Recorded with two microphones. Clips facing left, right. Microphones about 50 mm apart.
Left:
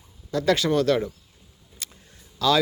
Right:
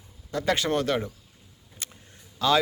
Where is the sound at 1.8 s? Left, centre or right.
Right.